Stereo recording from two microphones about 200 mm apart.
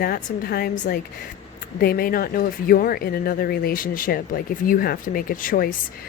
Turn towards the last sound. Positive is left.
turn(degrees=45)  # may be behind; listen again after turning